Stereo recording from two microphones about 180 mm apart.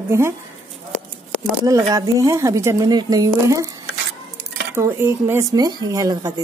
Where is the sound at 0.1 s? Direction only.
15° right (ahead or behind).